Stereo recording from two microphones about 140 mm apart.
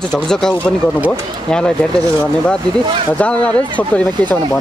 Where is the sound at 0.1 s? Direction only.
5° left (ahead or behind).